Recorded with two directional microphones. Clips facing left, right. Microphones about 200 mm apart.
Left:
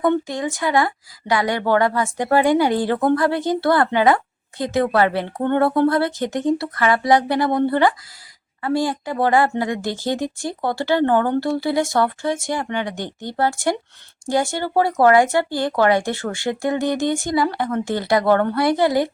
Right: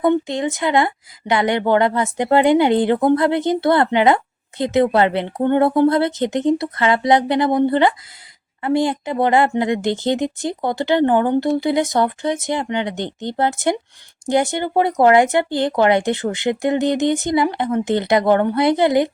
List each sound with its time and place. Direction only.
0.0 s a woman's voice: 20° right (ahead or behind)